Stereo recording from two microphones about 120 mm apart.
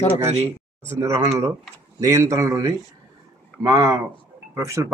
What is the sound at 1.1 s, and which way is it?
Speech, 60° right (ahead or behind).